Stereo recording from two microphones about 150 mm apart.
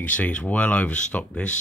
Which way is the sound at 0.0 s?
10° left (ahead or behind).